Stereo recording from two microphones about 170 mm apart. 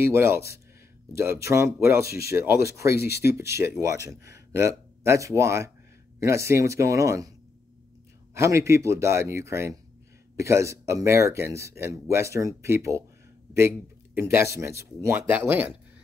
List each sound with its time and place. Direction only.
0.0 s speech: 15° right (ahead or behind)
8.4 s speech: 15° right (ahead or behind)